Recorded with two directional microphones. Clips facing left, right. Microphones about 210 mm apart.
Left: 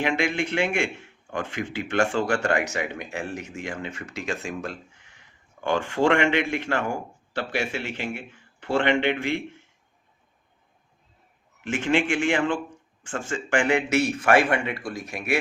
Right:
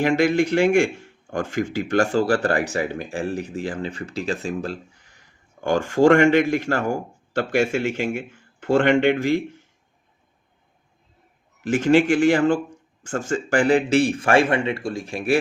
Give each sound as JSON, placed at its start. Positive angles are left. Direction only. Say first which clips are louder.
{"t": 0.0, "sound": "a man's voice", "louder": "right 7 dB", "side_deg": -40}
{"t": 11.6, "sound": "a man's voice", "louder": "right 7 dB", "side_deg": -40}